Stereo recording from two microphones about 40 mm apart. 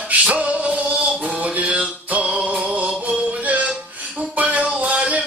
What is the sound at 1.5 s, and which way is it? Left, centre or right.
Music, right.